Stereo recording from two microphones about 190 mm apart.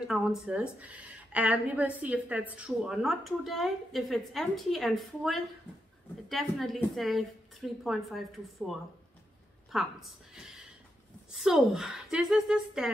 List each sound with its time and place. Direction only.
0.0 s a woman's voice: 5° right (ahead or behind)